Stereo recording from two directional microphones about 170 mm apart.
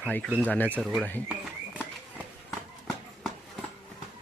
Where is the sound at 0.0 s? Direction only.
5° left (ahead or behind).